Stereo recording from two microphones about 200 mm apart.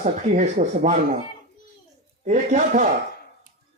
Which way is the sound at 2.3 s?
40° right (ahead or behind).